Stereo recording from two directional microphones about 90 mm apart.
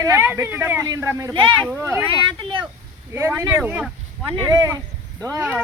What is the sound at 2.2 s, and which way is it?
Speech, 60° right (ahead or behind).